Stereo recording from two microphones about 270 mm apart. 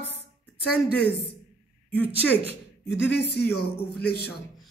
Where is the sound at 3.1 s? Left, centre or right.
Left.